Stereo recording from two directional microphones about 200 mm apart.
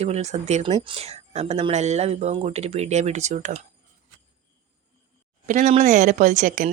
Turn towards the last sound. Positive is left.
turn(degrees=-40)  # may be behind; listen again after turning